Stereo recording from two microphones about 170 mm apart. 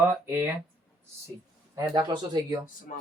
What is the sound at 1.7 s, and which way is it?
Speech, 25° right (ahead or behind).